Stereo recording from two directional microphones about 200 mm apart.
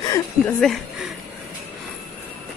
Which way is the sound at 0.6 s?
Centre (ahead or behind).